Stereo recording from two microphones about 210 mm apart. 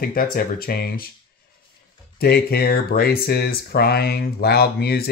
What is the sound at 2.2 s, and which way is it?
Speech, 50° left (ahead or behind).